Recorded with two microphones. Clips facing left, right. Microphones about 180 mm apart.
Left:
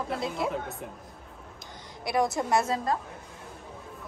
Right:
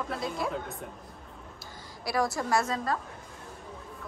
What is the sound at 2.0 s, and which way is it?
Speech, 20° left (ahead or behind).